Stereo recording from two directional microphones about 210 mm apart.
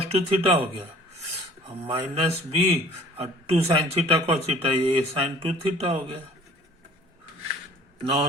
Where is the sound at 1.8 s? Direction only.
30° right (ahead or behind).